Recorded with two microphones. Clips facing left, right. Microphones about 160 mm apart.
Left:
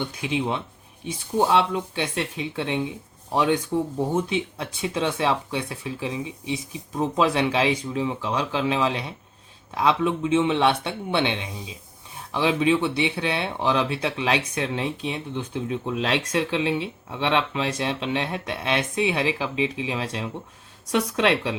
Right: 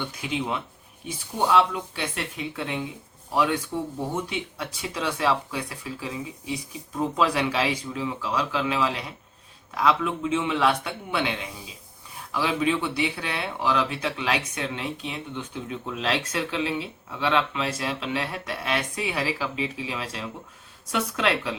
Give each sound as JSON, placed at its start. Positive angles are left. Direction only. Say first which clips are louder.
{"t": 0.2, "sound": "speech", "louder": "left 3 dB", "side_deg": 30}